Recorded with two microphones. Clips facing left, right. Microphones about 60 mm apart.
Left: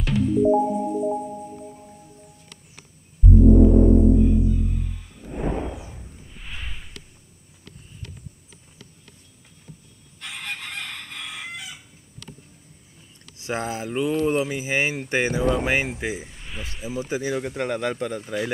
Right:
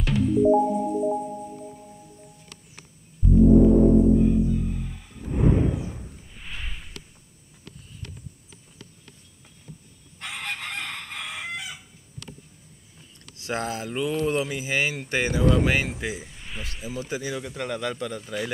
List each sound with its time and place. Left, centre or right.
0.0 s music: centre
3.3 s music: centre
6.0 s a sound: centre
10.2 s chicken: centre
13.4 s speech: centre
13.8 s a sound: centre
14.7 s speech: left
16.3 s snake: centre
16.6 s speech: centre